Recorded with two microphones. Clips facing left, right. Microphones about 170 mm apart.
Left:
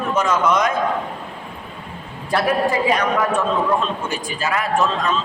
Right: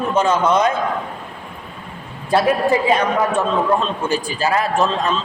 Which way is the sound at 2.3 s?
20° right (ahead or behind).